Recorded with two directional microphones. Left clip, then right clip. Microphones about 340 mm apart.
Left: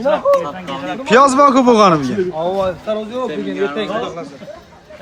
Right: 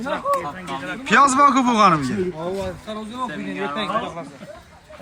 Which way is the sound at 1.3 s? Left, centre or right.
Centre.